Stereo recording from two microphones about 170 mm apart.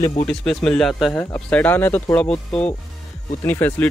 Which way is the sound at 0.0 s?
30° left (ahead or behind).